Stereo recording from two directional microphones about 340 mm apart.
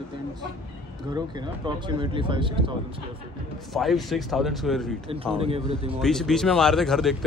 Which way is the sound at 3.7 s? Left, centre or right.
Centre.